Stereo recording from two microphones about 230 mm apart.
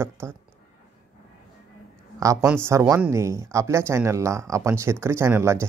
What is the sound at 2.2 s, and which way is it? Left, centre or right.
Speech, centre.